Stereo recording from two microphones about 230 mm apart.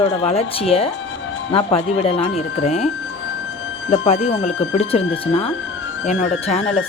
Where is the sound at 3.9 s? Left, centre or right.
Left.